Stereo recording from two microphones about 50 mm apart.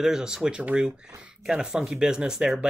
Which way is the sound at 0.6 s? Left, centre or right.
Right.